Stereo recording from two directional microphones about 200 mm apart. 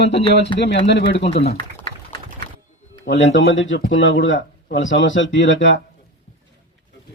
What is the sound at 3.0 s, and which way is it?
Speech, 65° left (ahead or behind).